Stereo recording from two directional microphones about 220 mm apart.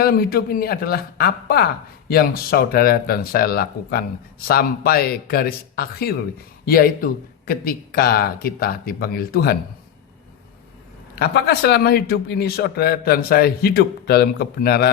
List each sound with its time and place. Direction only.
0.0 s speech: 40° left (ahead or behind)
11.1 s speech: 45° left (ahead or behind)